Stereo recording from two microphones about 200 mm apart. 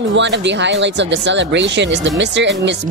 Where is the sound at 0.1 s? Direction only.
65° right (ahead or behind).